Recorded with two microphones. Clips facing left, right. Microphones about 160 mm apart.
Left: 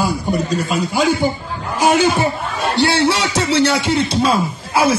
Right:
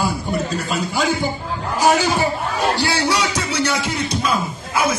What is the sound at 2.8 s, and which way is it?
Music, 25° left (ahead or behind).